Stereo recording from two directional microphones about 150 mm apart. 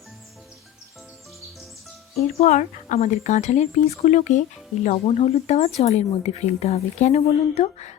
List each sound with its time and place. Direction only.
2.4 s speech: 50° left (ahead or behind)